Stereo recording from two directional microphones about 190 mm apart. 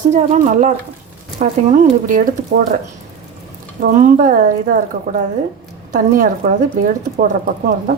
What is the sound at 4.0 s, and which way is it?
Speech, 45° right (ahead or behind).